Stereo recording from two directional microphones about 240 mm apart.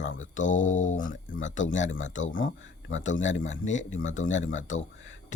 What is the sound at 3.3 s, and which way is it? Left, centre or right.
Speech, left.